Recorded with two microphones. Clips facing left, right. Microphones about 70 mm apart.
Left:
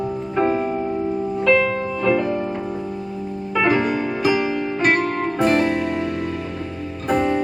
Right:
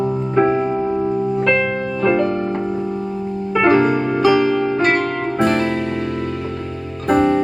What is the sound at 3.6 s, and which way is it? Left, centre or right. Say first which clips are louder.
Music: right 5 dB; right.